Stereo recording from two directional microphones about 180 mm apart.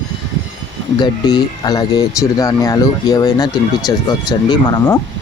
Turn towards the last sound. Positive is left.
turn(degrees=20)  # may be behind; listen again after turning